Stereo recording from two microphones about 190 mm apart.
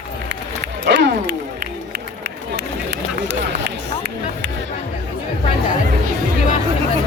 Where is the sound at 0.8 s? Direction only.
65° right (ahead or behind).